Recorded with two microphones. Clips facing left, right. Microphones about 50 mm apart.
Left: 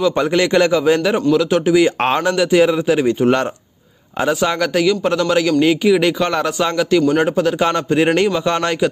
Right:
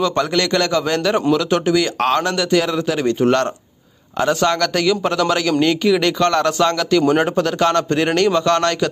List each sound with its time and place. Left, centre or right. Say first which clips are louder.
0.0 s a man's voice: left 2 dB; centre
2.0 s a man's voice: left 2 dB; left